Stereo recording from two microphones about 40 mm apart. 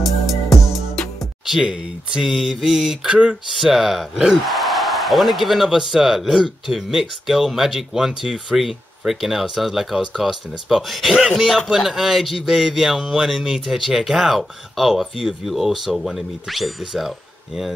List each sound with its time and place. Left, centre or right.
0.0 s music: centre
1.5 s speech: centre
3.1 s speech: right
3.5 s a man's voice: centre